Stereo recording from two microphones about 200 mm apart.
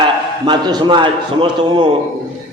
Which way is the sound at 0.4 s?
20° right (ahead or behind).